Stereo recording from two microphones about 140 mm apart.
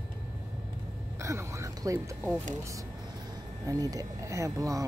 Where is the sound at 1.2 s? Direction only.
20° right (ahead or behind).